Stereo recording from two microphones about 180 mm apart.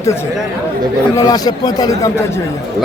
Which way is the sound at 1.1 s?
20° left (ahead or behind).